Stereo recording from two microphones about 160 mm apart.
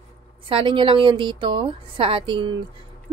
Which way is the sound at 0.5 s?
30° right (ahead or behind).